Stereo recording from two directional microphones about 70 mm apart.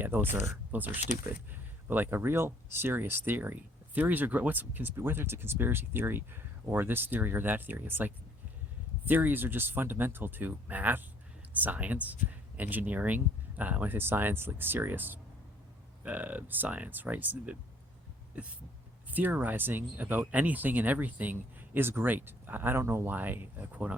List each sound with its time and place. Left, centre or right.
0.0 s speech: right
19.1 s speech: right